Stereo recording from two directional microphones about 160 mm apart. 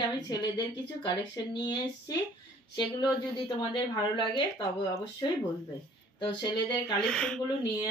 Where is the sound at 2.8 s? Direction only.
25° left (ahead or behind).